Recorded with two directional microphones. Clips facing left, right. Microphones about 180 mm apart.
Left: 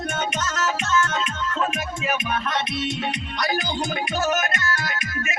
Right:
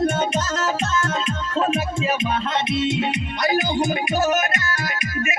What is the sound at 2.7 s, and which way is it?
Music, 25° right (ahead or behind).